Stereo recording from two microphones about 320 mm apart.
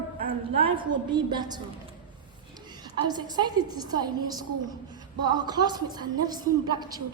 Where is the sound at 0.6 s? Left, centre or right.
Centre.